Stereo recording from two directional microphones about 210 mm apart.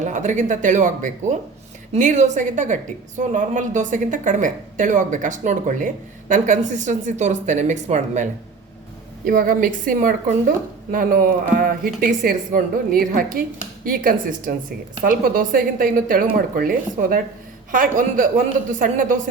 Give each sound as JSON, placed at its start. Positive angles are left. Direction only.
{"t": 0.0, "sound": "a woman's voice", "side_deg": -35}